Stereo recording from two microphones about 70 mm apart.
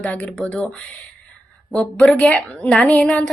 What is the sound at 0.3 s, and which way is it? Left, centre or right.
Speech, centre.